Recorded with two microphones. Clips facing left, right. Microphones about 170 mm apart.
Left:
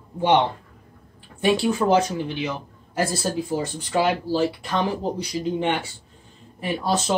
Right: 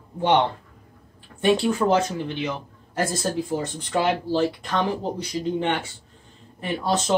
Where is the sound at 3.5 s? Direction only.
5° left (ahead or behind).